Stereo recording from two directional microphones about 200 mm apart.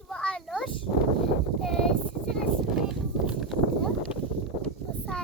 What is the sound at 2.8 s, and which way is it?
Horse, centre (ahead or behind).